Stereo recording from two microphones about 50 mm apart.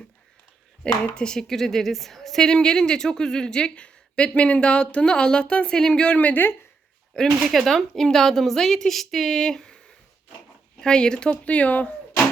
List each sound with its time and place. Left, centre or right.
1.1 s a woman's voice: centre
6.1 s speech: left
7.1 s speech: centre
7.6 s a woman's voice: centre; by 11.9 s left